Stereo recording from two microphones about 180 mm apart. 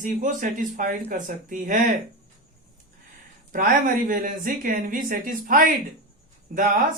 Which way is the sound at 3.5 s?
50° right (ahead or behind).